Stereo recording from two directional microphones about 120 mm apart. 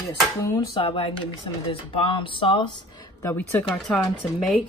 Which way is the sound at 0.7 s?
50° left (ahead or behind).